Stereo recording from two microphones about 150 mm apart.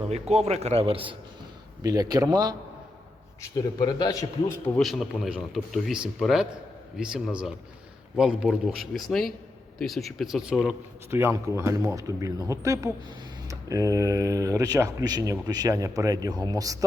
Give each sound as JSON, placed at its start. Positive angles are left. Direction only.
{"t": 0.1, "sound": "a man's voice", "side_deg": -45}
{"t": 1.8, "sound": "speech", "side_deg": -25}
{"t": 3.5, "sound": "a man's voice", "side_deg": 25}
{"t": 4.8, "sound": "speech", "side_deg": 0}
{"t": 11.1, "sound": "speech", "side_deg": -15}